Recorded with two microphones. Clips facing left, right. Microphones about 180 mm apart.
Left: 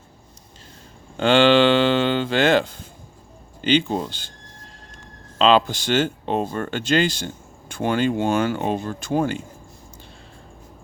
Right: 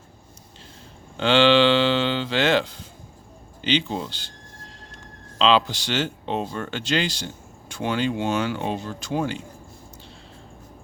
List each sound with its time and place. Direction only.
1.1 s a sound: 50° left (ahead or behind)
3.6 s speech: 50° left (ahead or behind)
5.4 s speech: 50° left (ahead or behind)